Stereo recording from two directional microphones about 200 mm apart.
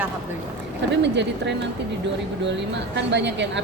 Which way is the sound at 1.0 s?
60° right (ahead or behind).